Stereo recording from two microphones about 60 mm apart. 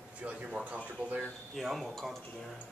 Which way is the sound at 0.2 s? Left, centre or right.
Right.